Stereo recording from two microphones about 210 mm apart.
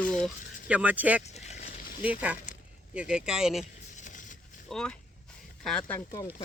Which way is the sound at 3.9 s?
35° left (ahead or behind).